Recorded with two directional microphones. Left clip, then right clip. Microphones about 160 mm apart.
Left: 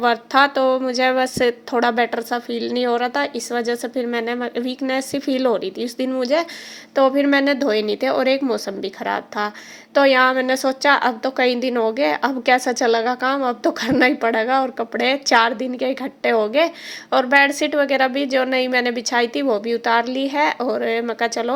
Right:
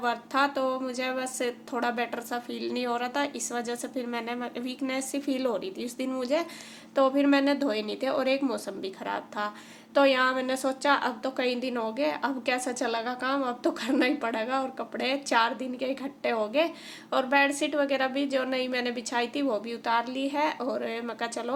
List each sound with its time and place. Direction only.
0.0 s a woman's voice: 45° left (ahead or behind)